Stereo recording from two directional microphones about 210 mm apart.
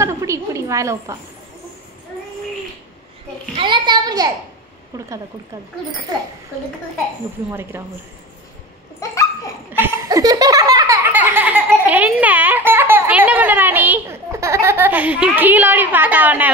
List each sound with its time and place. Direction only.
0.0 s a woman's voice: 15° right (ahead or behind)
3.5 s a child's voice: 20° right (ahead or behind)
7.7 s speech: 10° right (ahead or behind)
9.1 s laughter: 15° left (ahead or behind)
9.7 s laughter: 10° right (ahead or behind)